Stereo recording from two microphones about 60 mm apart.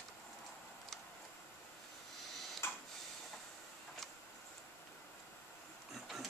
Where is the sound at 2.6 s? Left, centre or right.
Left.